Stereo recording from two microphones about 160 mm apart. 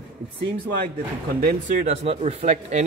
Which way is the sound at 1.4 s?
65° right (ahead or behind).